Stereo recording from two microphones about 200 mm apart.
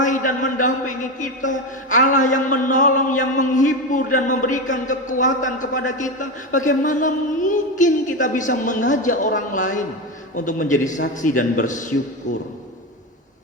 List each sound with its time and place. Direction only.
0.0 s a man's voice: 40° left (ahead or behind)